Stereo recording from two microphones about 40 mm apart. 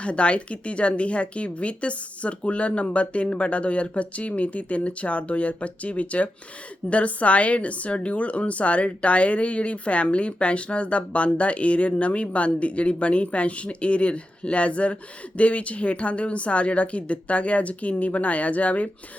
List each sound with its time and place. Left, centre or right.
0.0 s a woman's voice: left